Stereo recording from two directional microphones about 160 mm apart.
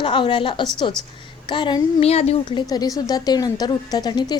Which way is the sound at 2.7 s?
25° left (ahead or behind).